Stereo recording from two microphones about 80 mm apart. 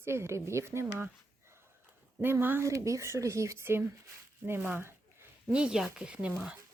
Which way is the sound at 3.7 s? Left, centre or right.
Right.